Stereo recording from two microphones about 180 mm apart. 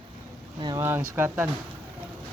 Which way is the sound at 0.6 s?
15° right (ahead or behind).